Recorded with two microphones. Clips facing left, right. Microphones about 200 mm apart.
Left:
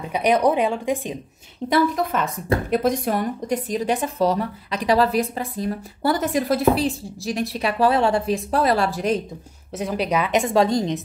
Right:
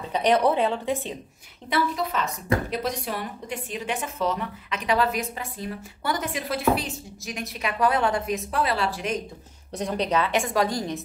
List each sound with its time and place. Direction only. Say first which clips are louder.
0.0 s speech: left 2 dB; 10° left (ahead or behind)
1.7 s a woman's voice: left 6 dB; 50° left (ahead or behind)
9.8 s a woman's voice: left 2 dB; 5° left (ahead or behind); by 11.0 s 20° left (ahead or behind)